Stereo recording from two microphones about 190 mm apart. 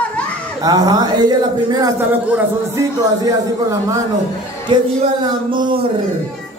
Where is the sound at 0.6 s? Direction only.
20° right (ahead or behind).